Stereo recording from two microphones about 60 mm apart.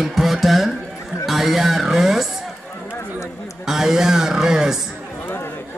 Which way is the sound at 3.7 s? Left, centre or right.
Centre.